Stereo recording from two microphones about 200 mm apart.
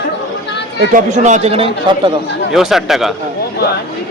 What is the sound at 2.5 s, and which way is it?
Speech, centre (ahead or behind).